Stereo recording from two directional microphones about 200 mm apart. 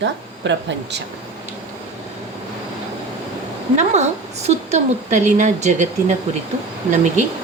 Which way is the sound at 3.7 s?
35° right (ahead or behind).